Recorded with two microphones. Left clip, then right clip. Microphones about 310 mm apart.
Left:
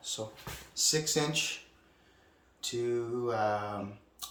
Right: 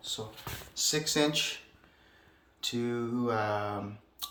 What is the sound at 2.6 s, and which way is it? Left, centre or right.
Speech, centre.